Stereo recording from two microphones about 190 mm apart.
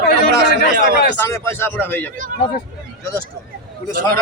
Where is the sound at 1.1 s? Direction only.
15° left (ahead or behind).